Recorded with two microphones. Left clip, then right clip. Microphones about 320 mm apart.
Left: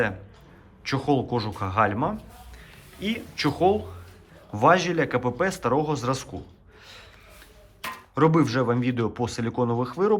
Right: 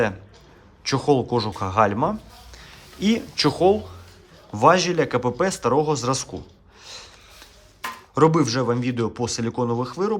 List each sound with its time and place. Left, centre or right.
0.9 s speech: centre
6.8 s snort: centre
8.1 s speech: centre